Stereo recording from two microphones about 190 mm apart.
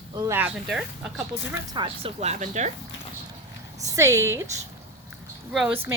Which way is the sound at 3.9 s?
15° right (ahead or behind).